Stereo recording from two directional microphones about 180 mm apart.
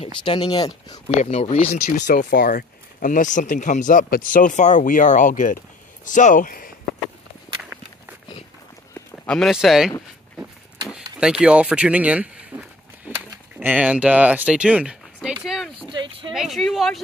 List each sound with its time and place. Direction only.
0.0 s speech: 30° left (ahead or behind)
1.0 s speech: 40° left (ahead or behind)
1.7 s speech: 50° left (ahead or behind)
9.1 s speech: 5° left (ahead or behind)
11.1 s speech: 5° right (ahead or behind)
12.5 s a sound: 10° right (ahead or behind)
13.6 s speech: 10° right (ahead or behind)
15.4 s a sound: centre (ahead or behind)
15.9 s a sound: 30° right (ahead or behind)
16.3 s speech: centre (ahead or behind)